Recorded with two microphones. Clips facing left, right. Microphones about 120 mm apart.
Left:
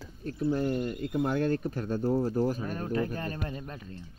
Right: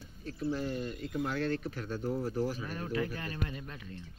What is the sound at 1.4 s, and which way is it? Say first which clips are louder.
Speech: left 5 dB; 45° left (ahead or behind).